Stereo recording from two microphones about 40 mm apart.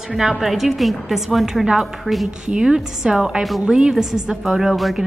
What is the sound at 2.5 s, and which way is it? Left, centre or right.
A woman's voice, centre.